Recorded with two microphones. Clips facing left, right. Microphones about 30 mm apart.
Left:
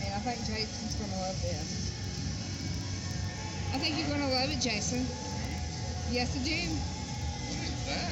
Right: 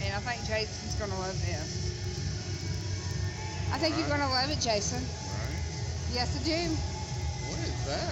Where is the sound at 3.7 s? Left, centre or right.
Centre.